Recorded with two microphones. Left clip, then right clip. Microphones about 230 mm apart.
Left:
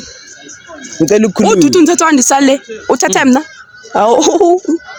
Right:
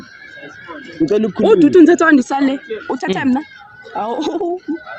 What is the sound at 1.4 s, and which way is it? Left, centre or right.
Speech, left.